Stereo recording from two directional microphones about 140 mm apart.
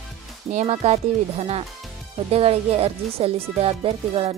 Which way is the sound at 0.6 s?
50° right (ahead or behind).